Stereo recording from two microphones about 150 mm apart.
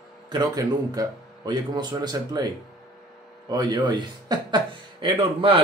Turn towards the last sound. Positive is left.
turn(degrees=-40)  # may be behind; listen again after turning